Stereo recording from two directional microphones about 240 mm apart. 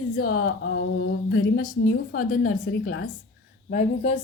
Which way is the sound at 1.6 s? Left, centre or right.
Left.